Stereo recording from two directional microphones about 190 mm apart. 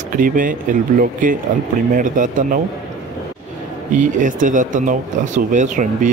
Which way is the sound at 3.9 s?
40° right (ahead or behind).